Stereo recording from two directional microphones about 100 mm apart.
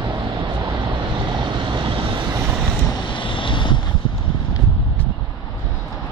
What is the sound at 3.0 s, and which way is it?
Boat, 55° left (ahead or behind).